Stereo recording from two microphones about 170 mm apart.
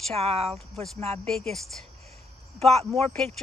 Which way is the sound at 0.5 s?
Centre (ahead or behind).